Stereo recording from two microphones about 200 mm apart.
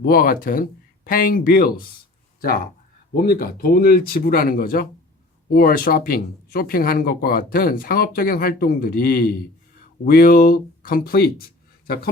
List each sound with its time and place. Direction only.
0.0 s speech: 45° left (ahead or behind)
3.2 s speech: 50° left (ahead or behind)